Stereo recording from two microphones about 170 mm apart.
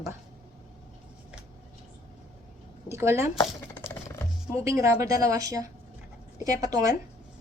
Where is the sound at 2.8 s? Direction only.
15° right (ahead or behind).